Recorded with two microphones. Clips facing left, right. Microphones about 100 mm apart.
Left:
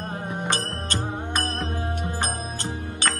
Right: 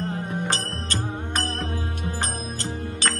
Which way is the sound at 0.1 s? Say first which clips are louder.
Right 1 dB; 15° left (ahead or behind).